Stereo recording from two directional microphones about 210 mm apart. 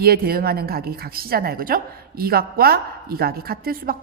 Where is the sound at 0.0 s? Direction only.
45° right (ahead or behind).